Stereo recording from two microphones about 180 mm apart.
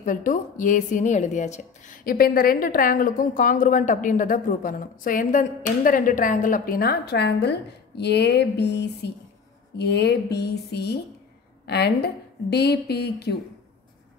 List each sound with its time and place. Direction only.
0.0 s a woman's voice: 45° left (ahead or behind); by 13.4 s 65° left (ahead or behind)